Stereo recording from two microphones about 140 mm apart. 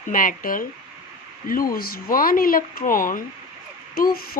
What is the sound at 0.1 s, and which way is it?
Speech, 80° left.